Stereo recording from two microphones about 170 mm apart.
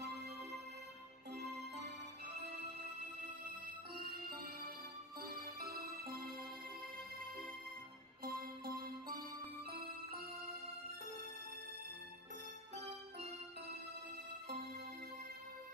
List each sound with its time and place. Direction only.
3.9 s music: 60° right (ahead or behind)
8.2 s music: 60° right (ahead or behind)